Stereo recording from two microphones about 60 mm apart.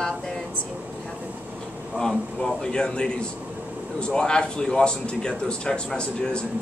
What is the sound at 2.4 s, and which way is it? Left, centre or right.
Speech, centre.